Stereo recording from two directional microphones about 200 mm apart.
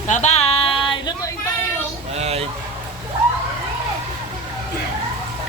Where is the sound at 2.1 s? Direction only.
30° right (ahead or behind).